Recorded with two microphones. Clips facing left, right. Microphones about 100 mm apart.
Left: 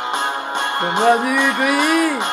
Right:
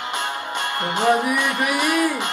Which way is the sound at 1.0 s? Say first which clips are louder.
Left 4 dB; 25° left (ahead or behind).